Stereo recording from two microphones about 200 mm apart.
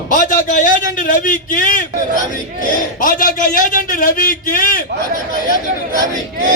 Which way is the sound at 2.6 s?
45° left (ahead or behind).